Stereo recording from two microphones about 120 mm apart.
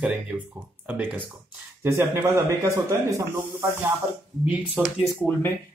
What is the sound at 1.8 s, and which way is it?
Speech, 25° right (ahead or behind).